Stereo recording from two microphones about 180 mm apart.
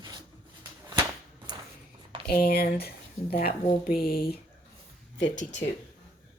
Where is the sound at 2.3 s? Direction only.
55° left (ahead or behind).